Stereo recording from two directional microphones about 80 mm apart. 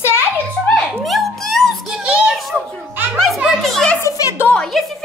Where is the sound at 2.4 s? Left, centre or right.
Centre.